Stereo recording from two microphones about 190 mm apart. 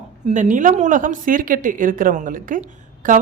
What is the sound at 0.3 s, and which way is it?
Speech, 40° right (ahead or behind).